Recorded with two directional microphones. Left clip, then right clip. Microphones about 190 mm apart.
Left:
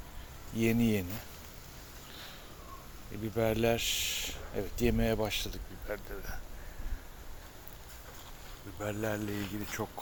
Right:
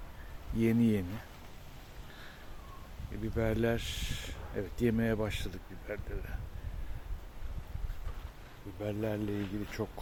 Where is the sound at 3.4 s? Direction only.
10° right (ahead or behind).